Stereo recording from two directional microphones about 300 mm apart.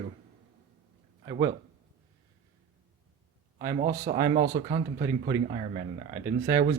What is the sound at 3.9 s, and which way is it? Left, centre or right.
Speech, centre.